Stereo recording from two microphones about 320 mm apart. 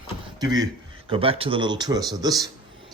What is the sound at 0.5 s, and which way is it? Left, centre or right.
Speech, centre.